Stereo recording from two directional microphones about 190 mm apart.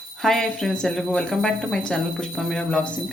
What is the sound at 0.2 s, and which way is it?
A woman's voice, centre (ahead or behind).